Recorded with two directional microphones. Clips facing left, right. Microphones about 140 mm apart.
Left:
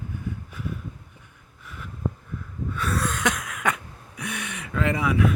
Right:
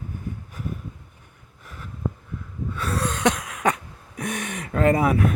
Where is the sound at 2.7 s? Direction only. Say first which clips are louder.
Right 1 dB; 30° right (ahead or behind).